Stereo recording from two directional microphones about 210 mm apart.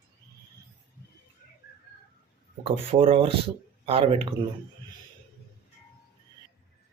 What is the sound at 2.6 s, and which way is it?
Speech, 25° right (ahead or behind).